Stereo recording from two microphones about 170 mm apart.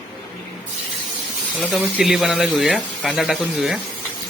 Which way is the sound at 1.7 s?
5° right (ahead or behind).